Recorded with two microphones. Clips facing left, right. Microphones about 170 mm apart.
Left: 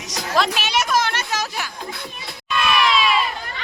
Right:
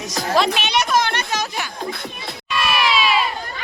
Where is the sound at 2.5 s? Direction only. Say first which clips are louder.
Left 1 dB; 5° right (ahead or behind).